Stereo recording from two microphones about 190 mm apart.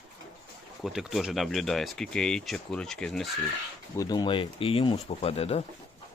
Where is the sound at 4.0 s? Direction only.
20° left (ahead or behind).